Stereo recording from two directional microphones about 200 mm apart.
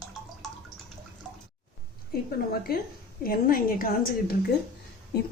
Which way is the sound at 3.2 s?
45° left (ahead or behind).